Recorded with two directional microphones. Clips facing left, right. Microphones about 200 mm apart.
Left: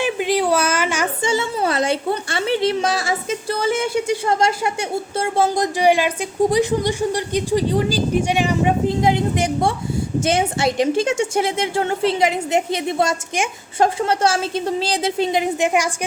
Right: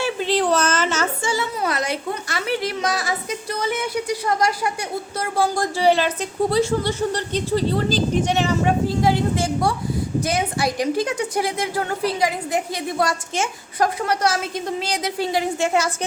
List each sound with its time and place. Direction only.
0.0 s speech: 15° left (ahead or behind)